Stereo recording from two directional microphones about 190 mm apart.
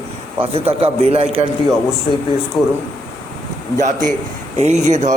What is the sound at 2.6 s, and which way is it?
Speech, centre (ahead or behind).